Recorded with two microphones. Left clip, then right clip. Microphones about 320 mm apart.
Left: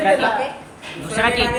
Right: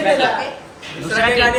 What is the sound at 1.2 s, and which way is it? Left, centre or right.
Speech, centre.